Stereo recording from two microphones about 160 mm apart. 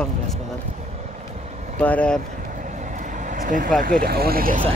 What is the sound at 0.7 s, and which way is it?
Vehicle, 50° right (ahead or behind).